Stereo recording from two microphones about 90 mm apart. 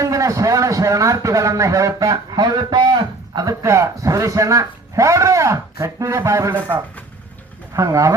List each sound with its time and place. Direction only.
0.0 s a man's voice: 35° right (ahead or behind)
2.4 s a man's voice: 55° right (ahead or behind)
3.3 s a man's voice: 40° right (ahead or behind)